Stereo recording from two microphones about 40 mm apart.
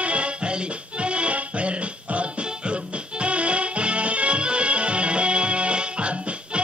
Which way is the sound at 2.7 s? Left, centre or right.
Right.